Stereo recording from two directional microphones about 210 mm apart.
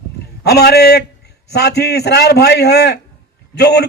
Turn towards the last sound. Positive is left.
turn(degrees=50)  # may be behind; listen again after turning